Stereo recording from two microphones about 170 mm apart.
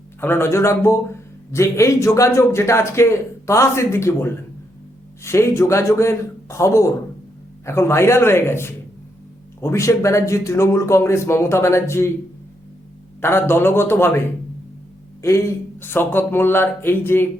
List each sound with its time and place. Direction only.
0.2 s a man's voice: 15° left (ahead or behind)
13.2 s a man's voice: 15° left (ahead or behind)
15.2 s a man's voice: 15° left (ahead or behind)